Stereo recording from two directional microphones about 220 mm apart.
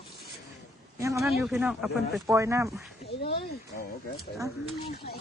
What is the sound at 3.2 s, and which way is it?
Speech, 45° left (ahead or behind).